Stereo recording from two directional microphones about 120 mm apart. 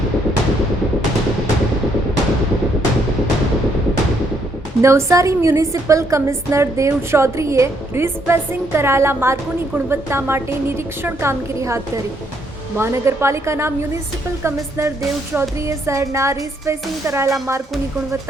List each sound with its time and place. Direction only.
4.8 s a woman's voice: 25° right (ahead or behind)